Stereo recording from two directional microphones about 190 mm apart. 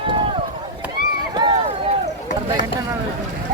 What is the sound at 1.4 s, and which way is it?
Run, 20° right (ahead or behind).